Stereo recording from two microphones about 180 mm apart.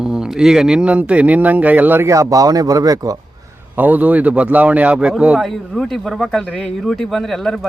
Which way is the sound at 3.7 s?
10° right (ahead or behind).